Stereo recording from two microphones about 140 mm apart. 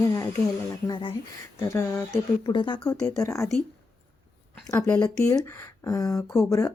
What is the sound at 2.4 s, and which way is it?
A woman's voice, 30° left (ahead or behind).